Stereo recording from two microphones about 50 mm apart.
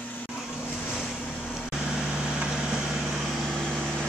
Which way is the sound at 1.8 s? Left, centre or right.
Centre.